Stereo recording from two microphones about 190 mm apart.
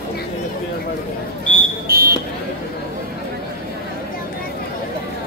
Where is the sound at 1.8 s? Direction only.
50° right (ahead or behind).